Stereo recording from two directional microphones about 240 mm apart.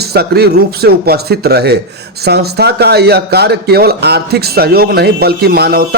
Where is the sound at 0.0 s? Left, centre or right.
Right.